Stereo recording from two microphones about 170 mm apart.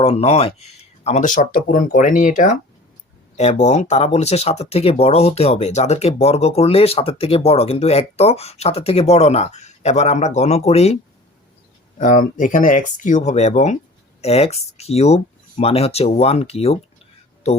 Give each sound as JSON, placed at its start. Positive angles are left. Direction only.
{"t": 0.0, "sound": "speech", "side_deg": 35}
{"t": 11.9, "sound": "speech", "side_deg": 50}